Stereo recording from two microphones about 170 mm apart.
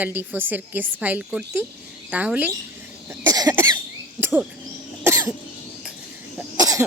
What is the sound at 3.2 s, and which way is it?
Cough, 20° right (ahead or behind).